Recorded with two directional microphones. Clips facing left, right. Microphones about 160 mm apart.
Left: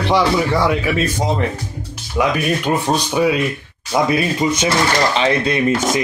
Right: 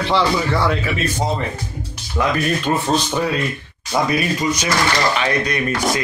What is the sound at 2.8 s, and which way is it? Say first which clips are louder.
Speech: left 3 dB; 15° left (ahead or behind).